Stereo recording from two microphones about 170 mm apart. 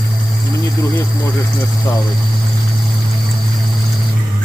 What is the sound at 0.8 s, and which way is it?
Speech, 15° left (ahead or behind).